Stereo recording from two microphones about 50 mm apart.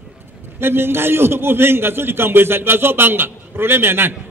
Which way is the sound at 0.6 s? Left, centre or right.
Right.